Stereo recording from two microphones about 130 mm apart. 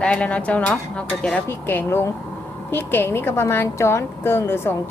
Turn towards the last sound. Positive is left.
turn(degrees=15)  # may be behind; listen again after turning